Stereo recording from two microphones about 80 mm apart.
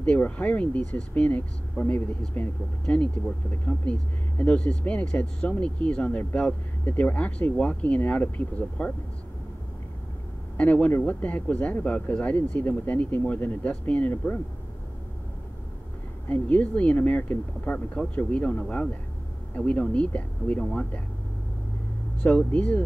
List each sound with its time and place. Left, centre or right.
0.0 s speech: centre
10.6 s speech: centre
16.3 s speech: centre
22.2 s speech: centre